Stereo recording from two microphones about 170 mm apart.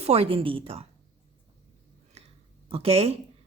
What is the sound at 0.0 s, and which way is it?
Speech, 35° right (ahead or behind).